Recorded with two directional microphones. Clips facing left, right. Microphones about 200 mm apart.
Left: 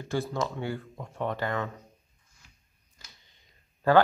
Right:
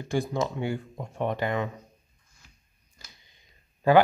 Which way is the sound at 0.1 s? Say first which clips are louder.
Right 3 dB; 15° right (ahead or behind).